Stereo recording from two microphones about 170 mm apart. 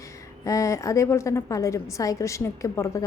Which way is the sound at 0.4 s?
20° left (ahead or behind).